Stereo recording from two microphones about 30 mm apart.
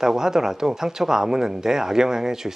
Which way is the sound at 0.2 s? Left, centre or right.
Centre.